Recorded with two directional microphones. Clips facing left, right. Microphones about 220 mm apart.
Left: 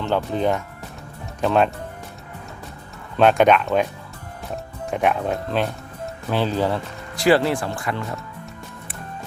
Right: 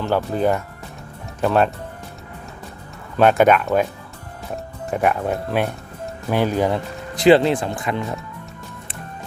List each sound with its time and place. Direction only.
0.0 s speech: 5° right (ahead or behind)
3.2 s speech: 5° right (ahead or behind)